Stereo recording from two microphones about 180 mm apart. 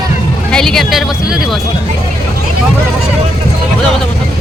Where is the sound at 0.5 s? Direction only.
5° left (ahead or behind).